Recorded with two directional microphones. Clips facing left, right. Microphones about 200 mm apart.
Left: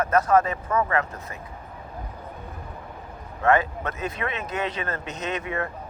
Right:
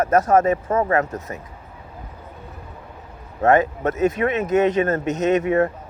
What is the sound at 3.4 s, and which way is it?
Speech, 40° right (ahead or behind).